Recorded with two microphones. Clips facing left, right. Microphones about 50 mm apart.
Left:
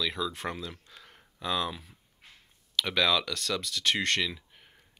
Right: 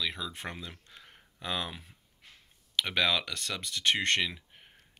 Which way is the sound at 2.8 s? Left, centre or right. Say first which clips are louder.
Left 2 dB; right.